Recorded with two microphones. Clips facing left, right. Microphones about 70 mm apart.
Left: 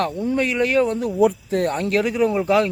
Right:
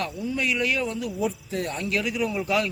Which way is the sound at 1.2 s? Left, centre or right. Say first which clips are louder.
Left 11 dB; left.